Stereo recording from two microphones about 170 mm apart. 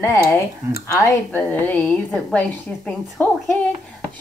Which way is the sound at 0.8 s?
15° left (ahead or behind).